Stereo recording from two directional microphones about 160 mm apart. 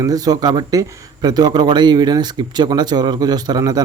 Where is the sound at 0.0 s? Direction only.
25° right (ahead or behind).